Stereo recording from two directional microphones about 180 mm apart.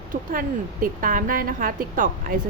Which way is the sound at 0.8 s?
50° right (ahead or behind).